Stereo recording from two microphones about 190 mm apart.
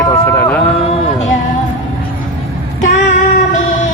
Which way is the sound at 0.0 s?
10° left (ahead or behind).